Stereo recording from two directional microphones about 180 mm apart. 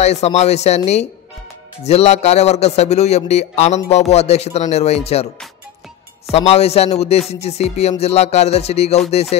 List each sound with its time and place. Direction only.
0.0 s a man's voice: 35° left (ahead or behind)
6.3 s a man's voice: 35° left (ahead or behind)